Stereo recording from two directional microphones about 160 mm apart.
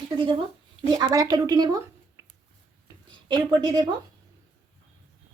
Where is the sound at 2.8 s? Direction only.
25° right (ahead or behind).